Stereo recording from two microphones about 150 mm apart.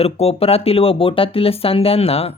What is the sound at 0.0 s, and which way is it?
Speech, 40° left (ahead or behind).